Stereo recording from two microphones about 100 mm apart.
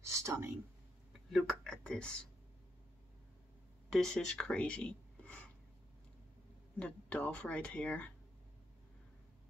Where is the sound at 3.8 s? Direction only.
5° left (ahead or behind).